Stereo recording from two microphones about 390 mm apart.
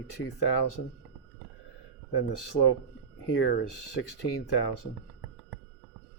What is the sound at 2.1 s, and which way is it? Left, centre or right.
Speech, left.